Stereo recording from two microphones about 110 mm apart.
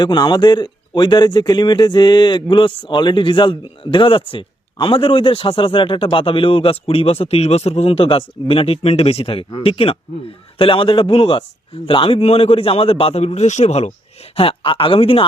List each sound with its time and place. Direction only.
0.0 s a man's voice: 40° left (ahead or behind); by 13.9 s 75° left (ahead or behind)
14.3 s a man's voice: 55° left (ahead or behind)